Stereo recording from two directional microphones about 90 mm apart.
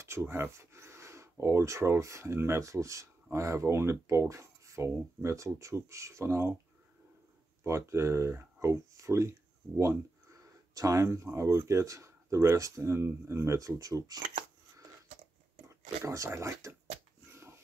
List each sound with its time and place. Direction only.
0.0 s a sound: 30° right (ahead or behind)
1.4 s speech: 30° right (ahead or behind)
7.6 s speech: 30° right (ahead or behind)
10.7 s speech: 40° right (ahead or behind)
15.7 s speech: 35° right (ahead or behind)
17.3 s a sound: 30° right (ahead or behind)